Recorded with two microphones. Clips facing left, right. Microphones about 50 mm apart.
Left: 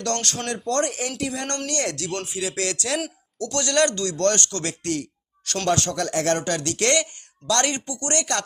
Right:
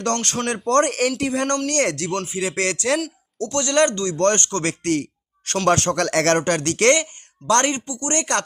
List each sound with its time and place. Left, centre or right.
0.0 s speech: right
0.5 s speech: right
1.2 s speech: right
3.5 s speech: centre; by 6.0 s right
6.0 s speech: right
6.3 s speech: right
6.9 s speech: right
7.9 s speech: centre
8.1 s speech: right